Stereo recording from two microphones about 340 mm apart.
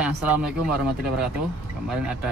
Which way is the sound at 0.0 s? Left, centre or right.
Centre.